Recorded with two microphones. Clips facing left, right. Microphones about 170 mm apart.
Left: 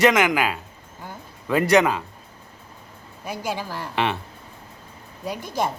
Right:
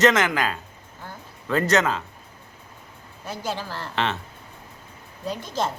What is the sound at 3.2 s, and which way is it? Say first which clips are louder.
Speech: left 2 dB; 10° left (ahead or behind).